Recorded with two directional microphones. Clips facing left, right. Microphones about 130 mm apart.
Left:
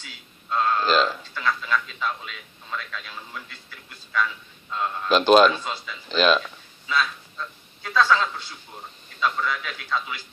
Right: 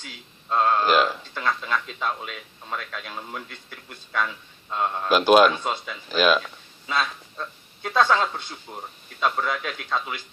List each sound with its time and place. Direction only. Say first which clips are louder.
0.0 s a sound: right 3 dB; 45° right (ahead or behind)
0.9 s a man's voice: left 1 dB; 15° right (ahead or behind)
1.3 s a man's voice: left 1 dB; 45° right (ahead or behind)
5.0 s a man's voice: left 1 dB; 10° right (ahead or behind)
5.6 s a man's voice: right 4 dB; 50° right (ahead or behind)
6.1 s a man's voice: even; 10° right (ahead or behind)
6.8 s a man's voice: left 1 dB; 45° right (ahead or behind)